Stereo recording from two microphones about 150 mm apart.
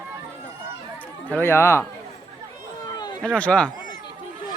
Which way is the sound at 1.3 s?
15° left (ahead or behind).